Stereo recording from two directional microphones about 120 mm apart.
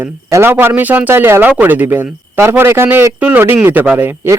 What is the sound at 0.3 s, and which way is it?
A man's voice, 20° right (ahead or behind).